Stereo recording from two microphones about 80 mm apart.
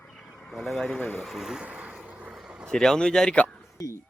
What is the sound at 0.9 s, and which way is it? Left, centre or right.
Speech, left.